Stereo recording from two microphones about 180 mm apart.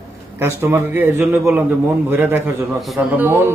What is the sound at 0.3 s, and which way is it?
A man's voice, 15° right (ahead or behind).